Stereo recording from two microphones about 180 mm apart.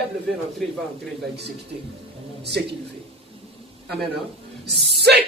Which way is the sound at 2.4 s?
70° right (ahead or behind).